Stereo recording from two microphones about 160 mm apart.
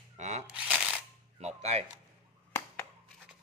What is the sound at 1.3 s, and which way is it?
Speech, 40° right (ahead or behind).